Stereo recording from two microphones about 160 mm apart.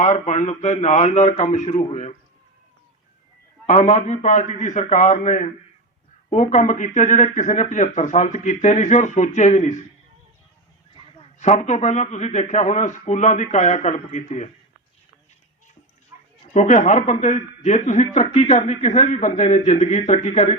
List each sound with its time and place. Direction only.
0.0 s a man's voice: 50° left (ahead or behind)
3.7 s a man's voice: 45° left (ahead or behind)
11.3 s a man's voice: 45° left (ahead or behind)
16.6 s a man's voice: 50° left (ahead or behind)